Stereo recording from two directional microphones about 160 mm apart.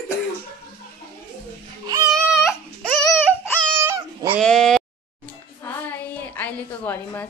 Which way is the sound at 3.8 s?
15° right (ahead or behind).